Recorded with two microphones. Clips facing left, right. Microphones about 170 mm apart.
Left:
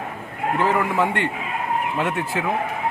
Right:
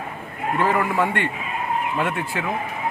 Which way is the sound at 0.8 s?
15° left (ahead or behind).